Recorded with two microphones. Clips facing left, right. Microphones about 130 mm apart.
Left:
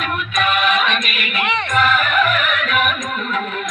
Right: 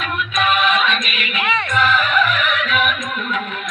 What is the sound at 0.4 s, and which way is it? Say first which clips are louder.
Music: right 1 dB; 50° left (ahead or behind).